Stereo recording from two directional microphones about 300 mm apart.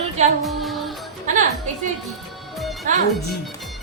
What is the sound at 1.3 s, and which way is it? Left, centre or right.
Speech, right.